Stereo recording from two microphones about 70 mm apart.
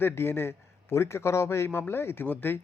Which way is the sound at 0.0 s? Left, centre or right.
Left.